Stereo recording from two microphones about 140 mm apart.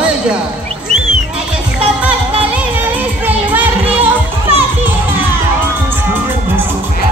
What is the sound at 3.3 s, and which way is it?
Music, 10° right (ahead or behind).